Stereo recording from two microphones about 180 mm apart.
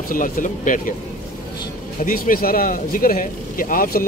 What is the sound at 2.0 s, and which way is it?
Speech, 50° left (ahead or behind).